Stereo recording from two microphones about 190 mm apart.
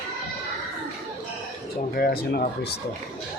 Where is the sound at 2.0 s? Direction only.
50° left (ahead or behind).